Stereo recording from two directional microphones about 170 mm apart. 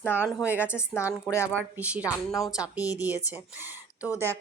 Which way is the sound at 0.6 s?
15° left (ahead or behind).